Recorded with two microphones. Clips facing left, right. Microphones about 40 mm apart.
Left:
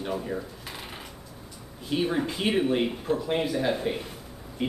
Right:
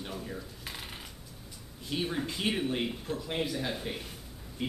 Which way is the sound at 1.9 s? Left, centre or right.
Centre.